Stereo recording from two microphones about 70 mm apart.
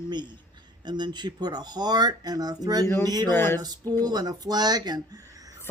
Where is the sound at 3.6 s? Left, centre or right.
Right.